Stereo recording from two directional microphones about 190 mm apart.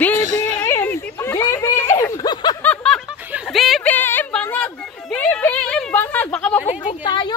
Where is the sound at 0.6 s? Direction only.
15° left (ahead or behind).